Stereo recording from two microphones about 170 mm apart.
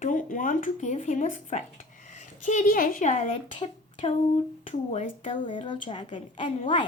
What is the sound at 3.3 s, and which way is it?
Speech, 30° left (ahead or behind).